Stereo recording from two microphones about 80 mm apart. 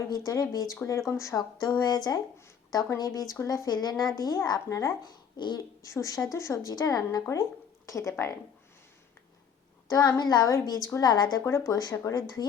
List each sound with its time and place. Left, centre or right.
0.3 s a woman's voice: left
1.5 s a woman's voice: left
5.4 s speech: left
6.0 s a woman's voice: left
9.9 s a woman's voice: left
10.5 s a woman's voice: left
11.3 s speech: left
11.6 s a woman's voice: left